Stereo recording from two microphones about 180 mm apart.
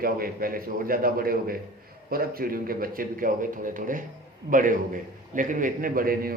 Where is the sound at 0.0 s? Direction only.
55° right (ahead or behind).